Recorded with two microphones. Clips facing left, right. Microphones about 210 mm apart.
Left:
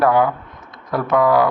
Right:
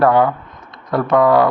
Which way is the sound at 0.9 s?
Centre (ahead or behind).